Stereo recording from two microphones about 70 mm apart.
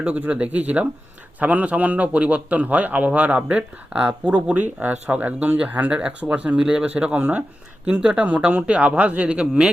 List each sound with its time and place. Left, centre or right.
0.0 s a man's voice: centre